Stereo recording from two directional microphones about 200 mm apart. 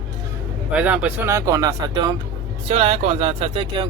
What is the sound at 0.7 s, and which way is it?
Speech, 5° right (ahead or behind).